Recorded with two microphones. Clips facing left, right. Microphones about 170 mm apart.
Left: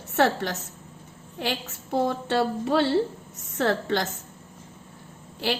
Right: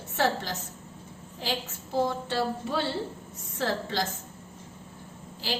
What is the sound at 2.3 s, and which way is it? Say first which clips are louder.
A woman's voice: left 6 dB; 65° left (ahead or behind).